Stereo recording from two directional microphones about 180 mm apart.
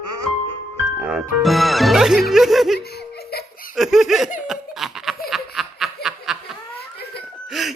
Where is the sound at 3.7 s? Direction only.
Centre (ahead or behind).